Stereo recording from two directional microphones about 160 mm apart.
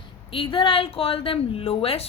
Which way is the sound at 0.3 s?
35° left (ahead or behind).